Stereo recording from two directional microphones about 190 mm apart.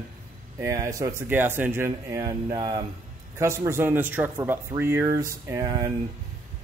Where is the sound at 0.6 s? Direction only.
15° right (ahead or behind).